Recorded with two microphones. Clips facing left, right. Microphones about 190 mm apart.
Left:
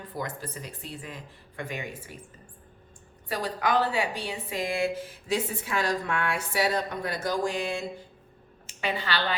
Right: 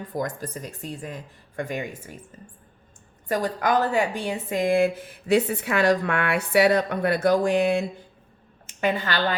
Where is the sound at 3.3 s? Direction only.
45° right (ahead or behind).